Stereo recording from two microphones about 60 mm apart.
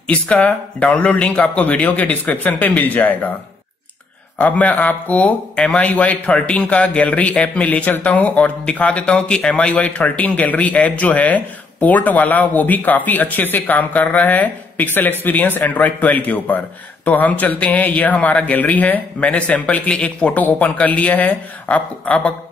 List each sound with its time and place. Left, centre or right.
0.0 s speech: left
4.4 s speech: left